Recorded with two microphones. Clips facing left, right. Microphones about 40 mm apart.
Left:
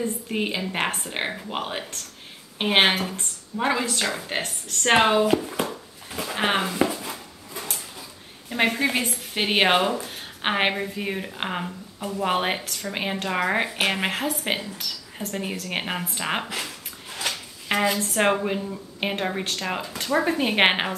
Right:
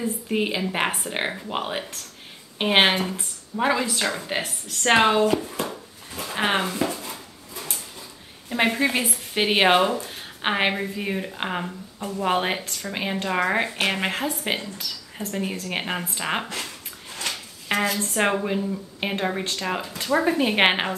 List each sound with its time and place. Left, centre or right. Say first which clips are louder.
0.0 s speech: right 2 dB; centre
4.9 s speech: even; centre
6.8 s a sound: left 2 dB; left
8.5 s speech: right 1 dB; centre
10.0 s a sound: even; centre
10.7 s speech: right 1 dB; centre